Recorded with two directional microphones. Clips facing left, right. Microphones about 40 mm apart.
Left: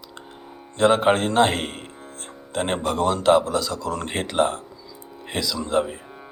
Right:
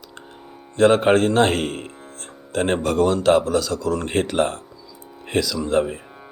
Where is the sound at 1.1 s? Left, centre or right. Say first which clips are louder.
Right 3 dB; centre.